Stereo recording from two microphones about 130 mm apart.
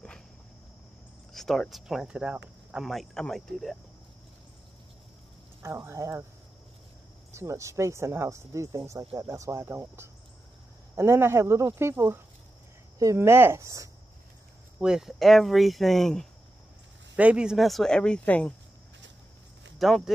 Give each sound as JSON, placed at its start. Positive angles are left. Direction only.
{"t": 1.3, "sound": "speech", "side_deg": 5}
{"t": 5.6, "sound": "speech", "side_deg": -20}
{"t": 7.3, "sound": "speech", "side_deg": -20}
{"t": 14.8, "sound": "speech", "side_deg": -5}
{"t": 17.1, "sound": "speech", "side_deg": -10}
{"t": 19.8, "sound": "speech", "side_deg": 0}